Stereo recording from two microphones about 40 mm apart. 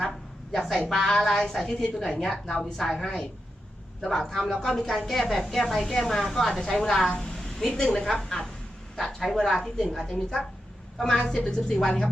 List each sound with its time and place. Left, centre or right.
0.5 s a woman's voice: centre
2.1 s a woman's voice: centre